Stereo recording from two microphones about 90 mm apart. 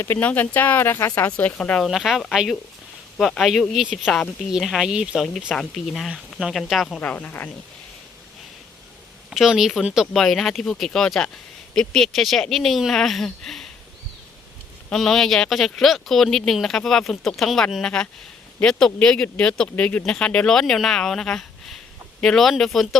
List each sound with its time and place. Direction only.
0.2 s speech: 15° left (ahead or behind)
1.9 s speech: centre (ahead or behind)
5.5 s speech: 5° left (ahead or behind)
7.0 s speech: 20° left (ahead or behind)
9.3 s speech: 5° right (ahead or behind)
14.8 s speech: 5° left (ahead or behind)